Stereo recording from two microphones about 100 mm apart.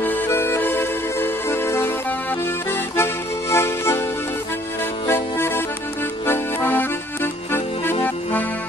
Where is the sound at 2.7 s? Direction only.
25° left (ahead or behind).